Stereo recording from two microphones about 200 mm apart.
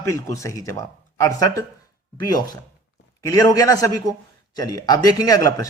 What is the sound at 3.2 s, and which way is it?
Speech, 15° left (ahead or behind).